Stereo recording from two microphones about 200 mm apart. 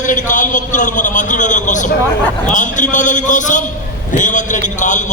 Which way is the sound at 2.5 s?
40° left (ahead or behind).